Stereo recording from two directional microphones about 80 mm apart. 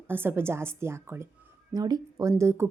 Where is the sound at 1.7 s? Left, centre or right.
Right.